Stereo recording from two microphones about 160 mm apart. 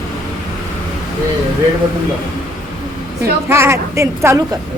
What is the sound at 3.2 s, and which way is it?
A woman's voice, 15° right (ahead or behind).